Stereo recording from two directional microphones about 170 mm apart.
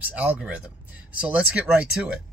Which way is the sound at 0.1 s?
10° right (ahead or behind).